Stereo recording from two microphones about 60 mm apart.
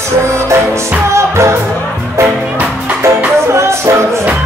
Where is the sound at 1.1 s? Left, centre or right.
Right.